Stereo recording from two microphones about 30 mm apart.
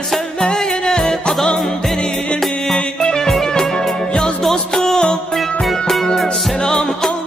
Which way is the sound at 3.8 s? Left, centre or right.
Left.